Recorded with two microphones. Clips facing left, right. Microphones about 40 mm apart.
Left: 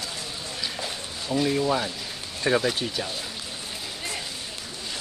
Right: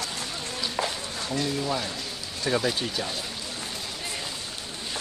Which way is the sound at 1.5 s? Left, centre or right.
Left.